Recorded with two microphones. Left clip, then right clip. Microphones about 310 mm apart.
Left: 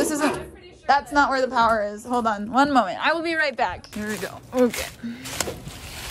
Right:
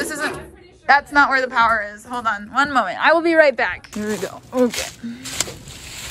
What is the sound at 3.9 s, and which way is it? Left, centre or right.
A woman's voice, centre.